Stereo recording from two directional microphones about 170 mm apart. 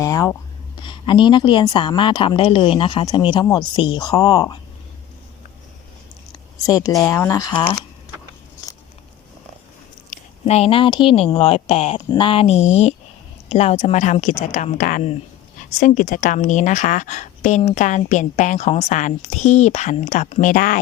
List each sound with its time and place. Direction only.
0.0 s writing: 20° left (ahead or behind)
0.8 s a woman's voice: 30° left (ahead or behind)
6.3 s speech: 20° left (ahead or behind)
10.1 s a woman's voice: 40° left (ahead or behind)